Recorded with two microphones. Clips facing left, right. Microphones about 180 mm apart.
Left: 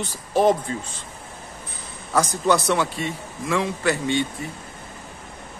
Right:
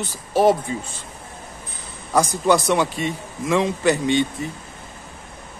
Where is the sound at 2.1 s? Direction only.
15° right (ahead or behind).